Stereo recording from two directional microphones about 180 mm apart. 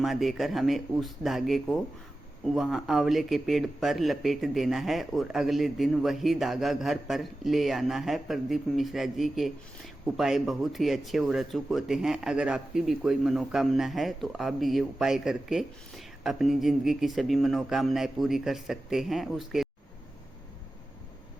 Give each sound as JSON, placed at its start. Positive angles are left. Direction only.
{"t": 0.0, "sound": "speech", "side_deg": 0}